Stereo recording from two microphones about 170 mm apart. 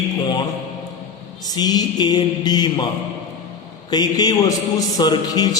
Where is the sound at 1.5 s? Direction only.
25° left (ahead or behind).